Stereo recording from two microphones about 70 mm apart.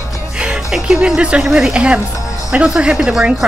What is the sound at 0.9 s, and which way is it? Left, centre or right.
A woman's voice, centre.